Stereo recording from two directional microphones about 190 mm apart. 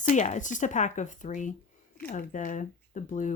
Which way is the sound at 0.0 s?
40° left (ahead or behind).